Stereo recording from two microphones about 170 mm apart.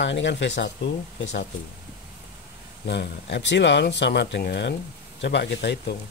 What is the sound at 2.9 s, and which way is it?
Speech, 90° left.